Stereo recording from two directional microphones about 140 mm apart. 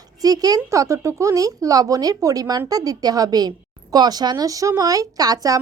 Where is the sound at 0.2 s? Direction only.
25° right (ahead or behind).